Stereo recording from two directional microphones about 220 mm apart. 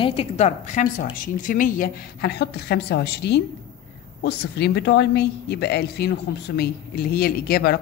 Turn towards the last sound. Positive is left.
turn(degrees=45)  # may be behind; listen again after turning